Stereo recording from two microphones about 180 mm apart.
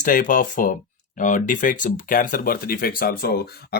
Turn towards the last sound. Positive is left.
turn(degrees=55)  # may be behind; listen again after turning